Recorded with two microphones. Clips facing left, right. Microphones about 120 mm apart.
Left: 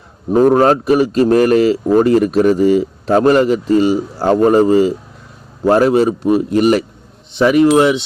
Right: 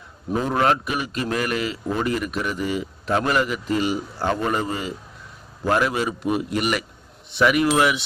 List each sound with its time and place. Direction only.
0.5 s a man's voice: 35° left (ahead or behind)
7.3 s wind chime: 30° left (ahead or behind)